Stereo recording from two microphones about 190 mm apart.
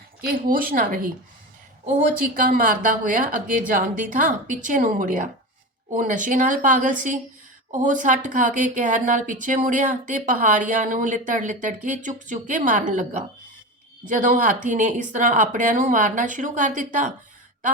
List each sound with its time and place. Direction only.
0.2 s a woman's voice: 50° right (ahead or behind)
2.3 s a woman's voice: 45° right (ahead or behind)